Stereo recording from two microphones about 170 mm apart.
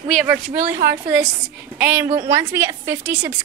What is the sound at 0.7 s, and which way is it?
A woman's voice, 15° right (ahead or behind).